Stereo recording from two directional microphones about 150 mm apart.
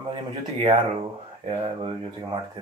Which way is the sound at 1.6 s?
35° right (ahead or behind).